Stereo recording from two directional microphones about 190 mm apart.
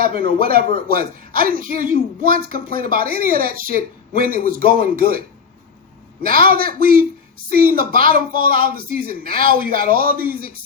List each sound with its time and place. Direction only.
0.0 s a man's voice: 50° right (ahead or behind)
6.2 s a man's voice: 50° right (ahead or behind)